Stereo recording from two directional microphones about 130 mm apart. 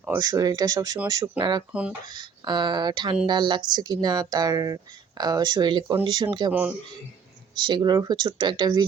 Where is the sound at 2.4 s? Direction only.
35° right (ahead or behind).